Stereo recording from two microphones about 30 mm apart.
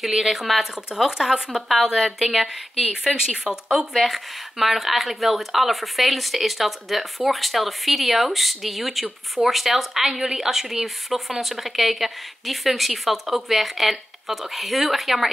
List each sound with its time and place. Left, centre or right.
0.3 s a woman's voice: centre
1.5 s a woman's voice: centre; by 3.5 s right
4.0 s a woman's voice: centre